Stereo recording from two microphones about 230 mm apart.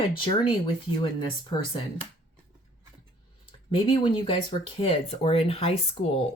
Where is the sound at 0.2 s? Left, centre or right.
Left.